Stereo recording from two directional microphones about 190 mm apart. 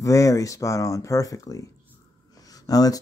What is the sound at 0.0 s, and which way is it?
Speech, 15° left (ahead or behind).